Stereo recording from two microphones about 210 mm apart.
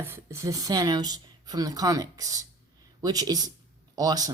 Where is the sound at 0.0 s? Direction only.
10° right (ahead or behind).